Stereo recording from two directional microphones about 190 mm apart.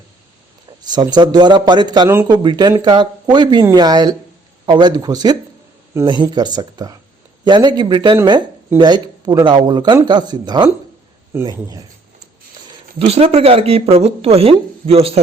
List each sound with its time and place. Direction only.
0.9 s a man's voice: 20° right (ahead or behind)
13.0 s speech: 30° right (ahead or behind)